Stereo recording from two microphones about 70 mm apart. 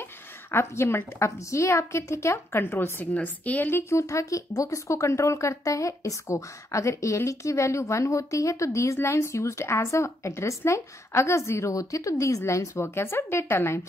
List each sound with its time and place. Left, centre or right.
0.5 s a woman's voice: left
2.6 s a woman's voice: left
3.9 s speech: left
12.7 s a woman's voice: left